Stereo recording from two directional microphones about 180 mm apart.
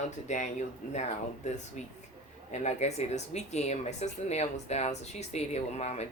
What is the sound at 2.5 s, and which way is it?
A woman's voice, 40° left (ahead or behind).